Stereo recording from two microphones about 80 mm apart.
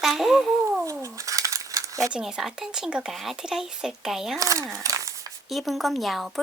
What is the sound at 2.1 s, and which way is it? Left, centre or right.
Speech, centre.